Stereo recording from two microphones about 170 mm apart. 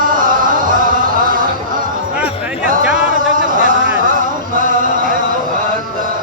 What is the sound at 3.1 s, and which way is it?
Music, 50° right (ahead or behind).